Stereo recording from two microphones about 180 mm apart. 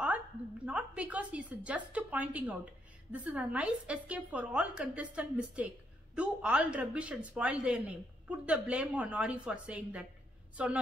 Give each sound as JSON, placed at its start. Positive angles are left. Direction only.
{"t": 0.7, "sound": "a woman's voice", "side_deg": -5}